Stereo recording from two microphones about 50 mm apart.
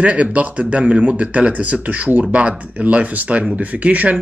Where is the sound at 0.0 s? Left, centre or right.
Right.